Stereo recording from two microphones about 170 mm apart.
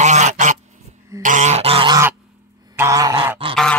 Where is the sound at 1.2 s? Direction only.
50° right (ahead or behind); by 2.0 s 30° right (ahead or behind).